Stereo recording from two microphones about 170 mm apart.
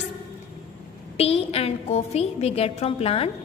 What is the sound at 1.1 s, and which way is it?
A woman's voice, 35° left (ahead or behind).